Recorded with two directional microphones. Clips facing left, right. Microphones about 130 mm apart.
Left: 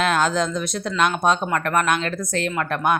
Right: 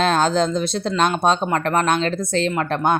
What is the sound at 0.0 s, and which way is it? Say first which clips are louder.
Speech: right 3 dB; 30° right (ahead or behind).